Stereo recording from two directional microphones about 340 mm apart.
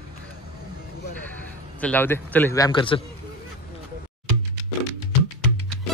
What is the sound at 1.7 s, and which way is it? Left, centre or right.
Speech, centre.